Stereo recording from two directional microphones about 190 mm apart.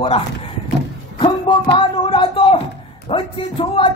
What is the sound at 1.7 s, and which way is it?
Speech, 30° left (ahead or behind).